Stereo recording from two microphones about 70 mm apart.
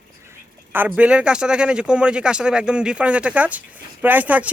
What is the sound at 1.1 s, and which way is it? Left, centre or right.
Speech, centre.